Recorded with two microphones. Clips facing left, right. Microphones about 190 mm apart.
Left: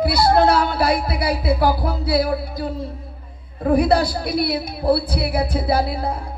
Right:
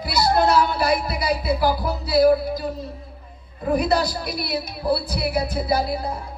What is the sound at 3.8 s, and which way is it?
A woman's voice, 55° left (ahead or behind).